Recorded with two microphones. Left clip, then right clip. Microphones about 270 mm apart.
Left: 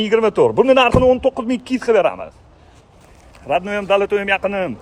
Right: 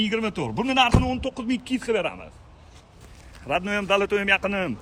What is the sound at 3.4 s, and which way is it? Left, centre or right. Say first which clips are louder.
A man's voice: left 6 dB; centre.